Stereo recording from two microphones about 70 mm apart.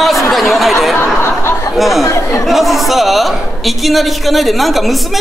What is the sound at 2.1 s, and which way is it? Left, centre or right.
Speech, left.